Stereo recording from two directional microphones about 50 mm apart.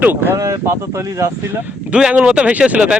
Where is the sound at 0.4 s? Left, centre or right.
Right.